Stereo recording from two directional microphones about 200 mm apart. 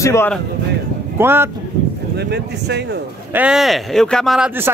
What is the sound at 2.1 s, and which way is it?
Speech, 55° right (ahead or behind).